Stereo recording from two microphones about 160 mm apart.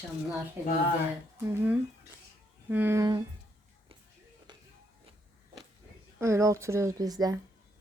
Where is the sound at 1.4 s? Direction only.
15° right (ahead or behind).